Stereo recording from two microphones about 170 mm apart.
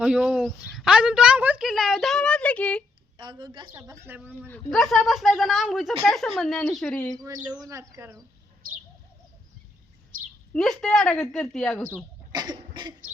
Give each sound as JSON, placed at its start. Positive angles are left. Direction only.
{"t": 0.0, "sound": "a woman's voice", "side_deg": -5}
{"t": 3.2, "sound": "a woman's voice", "side_deg": -25}
{"t": 4.0, "sound": "speech", "side_deg": -10}
{"t": 4.4, "sound": "a woman's voice", "side_deg": 5}
{"t": 7.2, "sound": "a woman's voice", "side_deg": -20}
{"t": 10.5, "sound": "a woman's voice", "side_deg": 5}
{"t": 12.3, "sound": "cough", "side_deg": -25}